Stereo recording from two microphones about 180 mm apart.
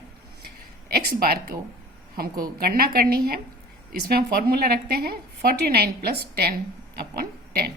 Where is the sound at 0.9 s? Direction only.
55° right (ahead or behind).